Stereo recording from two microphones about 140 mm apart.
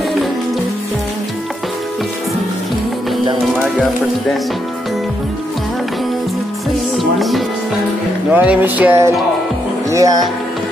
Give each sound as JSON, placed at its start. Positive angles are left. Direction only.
{"t": 7.0, "sound": "music", "side_deg": 0}
{"t": 8.3, "sound": "music", "side_deg": -10}
{"t": 9.8, "sound": "speech", "side_deg": -25}